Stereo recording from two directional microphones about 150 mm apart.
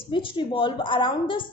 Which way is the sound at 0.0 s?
35° left (ahead or behind).